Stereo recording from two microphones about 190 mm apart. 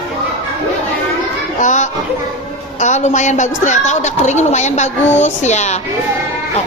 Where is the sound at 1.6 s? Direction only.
40° left (ahead or behind).